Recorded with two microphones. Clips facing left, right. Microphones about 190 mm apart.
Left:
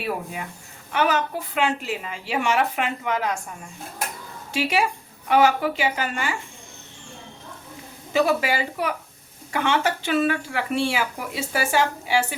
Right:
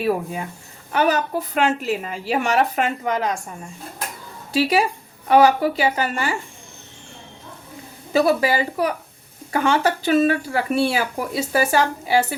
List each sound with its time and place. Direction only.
0.9 s speech: 40° right (ahead or behind)
4.5 s speech: 35° right (ahead or behind)
8.1 s speech: 35° right (ahead or behind)